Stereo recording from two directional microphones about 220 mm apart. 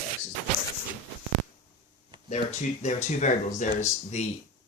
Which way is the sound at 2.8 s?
35° left (ahead or behind).